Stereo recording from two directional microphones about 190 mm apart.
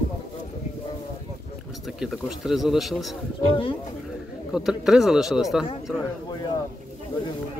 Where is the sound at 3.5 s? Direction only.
25° left (ahead or behind).